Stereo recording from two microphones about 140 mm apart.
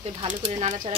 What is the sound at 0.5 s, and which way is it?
Speech, 40° right (ahead or behind).